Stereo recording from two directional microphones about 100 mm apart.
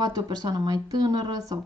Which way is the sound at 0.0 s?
40° right (ahead or behind).